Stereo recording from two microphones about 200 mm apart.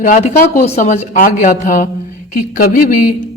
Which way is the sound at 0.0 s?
40° left (ahead or behind).